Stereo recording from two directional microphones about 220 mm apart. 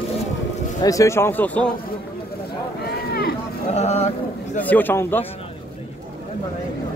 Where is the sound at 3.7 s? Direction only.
30° left (ahead or behind).